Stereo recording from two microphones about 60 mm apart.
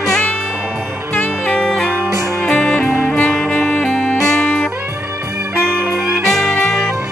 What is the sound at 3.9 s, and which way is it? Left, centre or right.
Music, centre.